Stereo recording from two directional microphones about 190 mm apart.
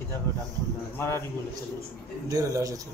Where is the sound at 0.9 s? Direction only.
15° left (ahead or behind).